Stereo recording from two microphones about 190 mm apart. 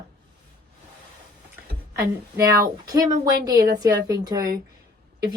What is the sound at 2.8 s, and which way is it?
Speech, 20° right (ahead or behind).